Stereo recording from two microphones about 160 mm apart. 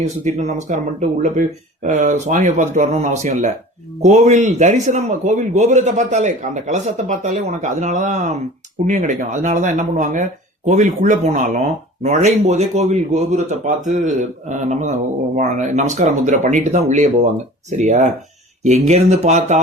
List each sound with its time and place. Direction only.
0.0 s a man's voice: 45° right (ahead or behind)